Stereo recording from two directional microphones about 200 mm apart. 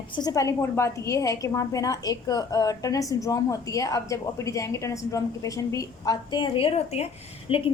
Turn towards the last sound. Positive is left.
turn(degrees=25)  # may be behind; listen again after turning